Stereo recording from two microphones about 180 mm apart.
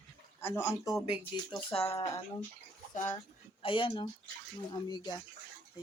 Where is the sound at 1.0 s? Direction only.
25° left (ahead or behind).